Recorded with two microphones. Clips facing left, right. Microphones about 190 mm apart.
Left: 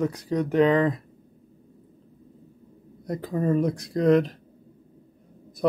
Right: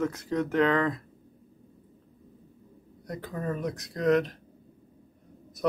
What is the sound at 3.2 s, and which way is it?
Speech, 30° left (ahead or behind).